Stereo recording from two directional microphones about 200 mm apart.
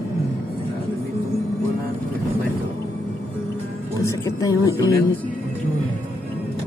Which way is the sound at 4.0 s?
15° left (ahead or behind).